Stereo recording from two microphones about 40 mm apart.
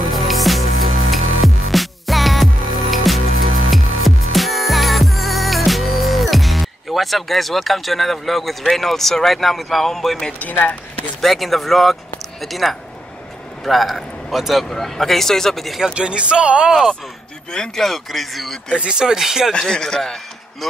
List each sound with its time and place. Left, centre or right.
0.0 s music: centre
10.6 s speech: left
11.1 s a man's voice: centre
14.7 s speech: centre
15.9 s speech: right
17.7 s speech: centre
18.9 s speech: centre
19.7 s speech: centre